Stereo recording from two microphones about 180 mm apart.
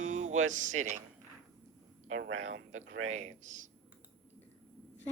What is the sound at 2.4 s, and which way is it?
Speech, 40° right (ahead or behind).